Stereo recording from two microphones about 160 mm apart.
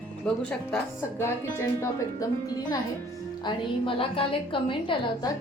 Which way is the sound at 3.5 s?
35° left (ahead or behind).